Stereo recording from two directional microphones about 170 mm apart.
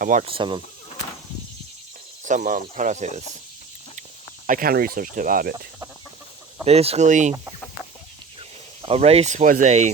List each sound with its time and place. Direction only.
0.0 s speech: 50° right (ahead or behind)
0.3 s speech: 30° right (ahead or behind)
2.2 s speech: 50° right (ahead or behind)
4.4 s speech: 55° right (ahead or behind)
6.7 s speech: 35° right (ahead or behind)
8.4 s speech: 35° right (ahead or behind)